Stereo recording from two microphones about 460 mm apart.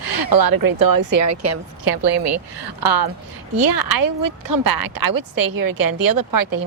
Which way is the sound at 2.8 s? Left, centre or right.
Right.